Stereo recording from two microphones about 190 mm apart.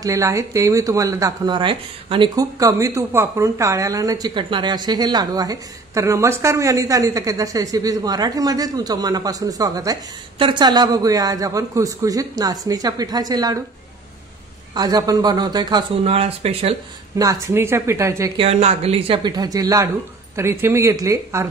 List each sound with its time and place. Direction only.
0.0 s speech: 15° right (ahead or behind)
14.7 s speech: 20° right (ahead or behind)
17.2 s a woman's voice: 15° right (ahead or behind)
18.4 s a woman's voice: 35° right (ahead or behind); by 21.5 s 15° right (ahead or behind)